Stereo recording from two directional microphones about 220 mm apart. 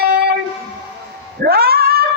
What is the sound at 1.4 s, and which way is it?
Cat, 45° right (ahead or behind).